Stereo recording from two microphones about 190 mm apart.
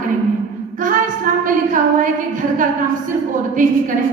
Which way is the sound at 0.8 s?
45° right (ahead or behind).